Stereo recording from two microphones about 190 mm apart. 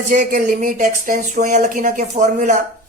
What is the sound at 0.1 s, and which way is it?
Speech, 45° right (ahead or behind).